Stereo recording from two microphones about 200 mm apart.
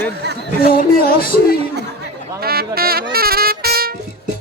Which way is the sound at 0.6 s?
45° left (ahead or behind).